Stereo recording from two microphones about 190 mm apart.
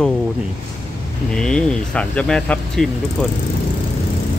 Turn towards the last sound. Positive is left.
turn(degrees=0)  # may be behind; listen again after turning